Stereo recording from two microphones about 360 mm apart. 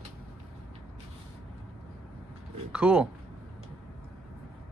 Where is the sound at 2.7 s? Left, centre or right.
Centre.